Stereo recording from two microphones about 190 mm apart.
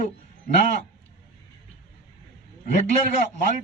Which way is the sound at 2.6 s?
40° left (ahead or behind).